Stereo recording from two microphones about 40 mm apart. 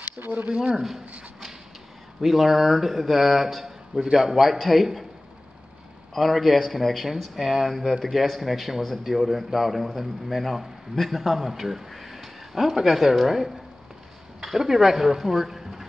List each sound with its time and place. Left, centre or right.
0.5 s speech: right
2.2 s a man's voice: centre
6.1 s a man's voice: centre